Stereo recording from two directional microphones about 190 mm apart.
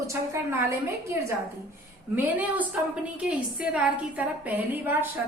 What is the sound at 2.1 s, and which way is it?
A woman's voice, 5° right (ahead or behind).